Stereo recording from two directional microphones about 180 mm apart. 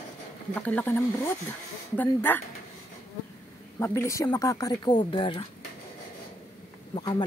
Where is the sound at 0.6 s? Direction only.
10° left (ahead or behind).